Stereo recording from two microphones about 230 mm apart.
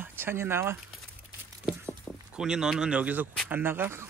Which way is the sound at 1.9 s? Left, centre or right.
Centre.